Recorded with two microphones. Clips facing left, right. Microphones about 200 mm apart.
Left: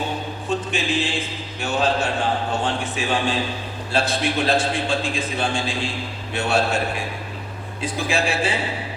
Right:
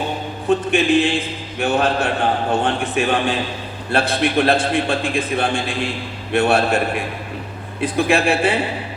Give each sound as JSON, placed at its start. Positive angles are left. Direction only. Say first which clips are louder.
{"t": 0.4, "sound": "a man's voice", "louder": "right 9 dB", "side_deg": -60}